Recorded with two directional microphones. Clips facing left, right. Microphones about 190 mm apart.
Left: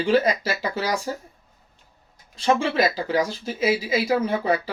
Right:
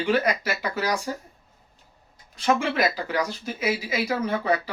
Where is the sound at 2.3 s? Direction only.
25° left (ahead or behind).